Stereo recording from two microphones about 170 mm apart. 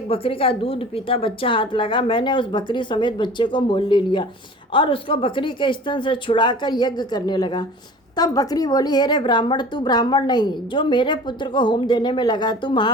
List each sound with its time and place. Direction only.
0.1 s a woman's voice: 30° left (ahead or behind)